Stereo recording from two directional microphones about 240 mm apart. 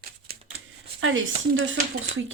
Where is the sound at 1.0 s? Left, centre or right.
Right.